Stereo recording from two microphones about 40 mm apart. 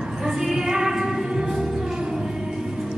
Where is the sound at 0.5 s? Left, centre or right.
Centre.